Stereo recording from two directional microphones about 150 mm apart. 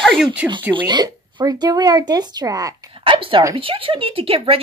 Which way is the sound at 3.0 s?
35° right (ahead or behind).